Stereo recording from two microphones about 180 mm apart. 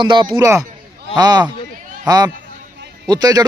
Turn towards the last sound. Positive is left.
turn(degrees=-20)  # may be behind; listen again after turning